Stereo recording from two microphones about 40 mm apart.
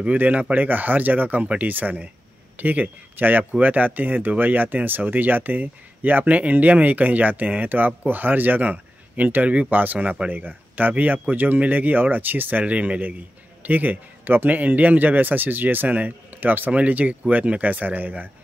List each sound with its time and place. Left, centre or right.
0.2 s a man's voice: right
12.7 s speech: right
13.6 s speech: right
16.7 s speech: right